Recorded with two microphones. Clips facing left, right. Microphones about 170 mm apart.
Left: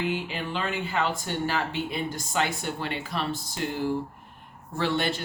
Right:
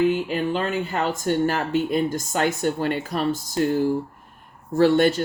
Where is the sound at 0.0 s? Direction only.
45° right (ahead or behind).